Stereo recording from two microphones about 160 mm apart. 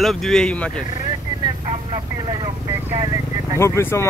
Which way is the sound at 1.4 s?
30° right (ahead or behind).